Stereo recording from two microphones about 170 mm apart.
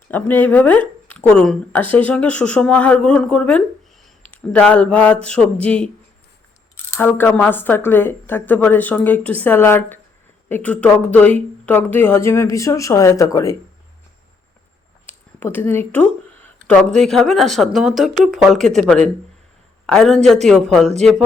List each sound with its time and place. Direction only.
0.1 s speech: 10° left (ahead or behind)
15.0 s speech: 10° left (ahead or behind)